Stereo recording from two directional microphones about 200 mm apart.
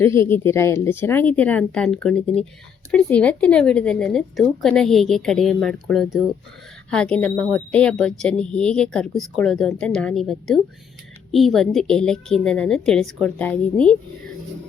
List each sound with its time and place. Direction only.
0.0 s a woman's voice: 15° left (ahead or behind)